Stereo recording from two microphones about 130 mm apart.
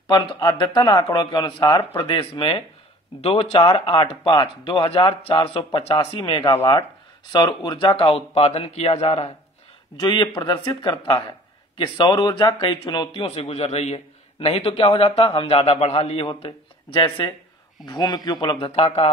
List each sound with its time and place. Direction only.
0.0 s a man's voice: 35° left (ahead or behind)
6.2 s speech: 35° left (ahead or behind)
7.4 s a man's voice: 35° left (ahead or behind)
9.9 s speech: 35° left (ahead or behind)
13.2 s a man's voice: 50° left (ahead or behind)
17.8 s speech: 30° left (ahead or behind)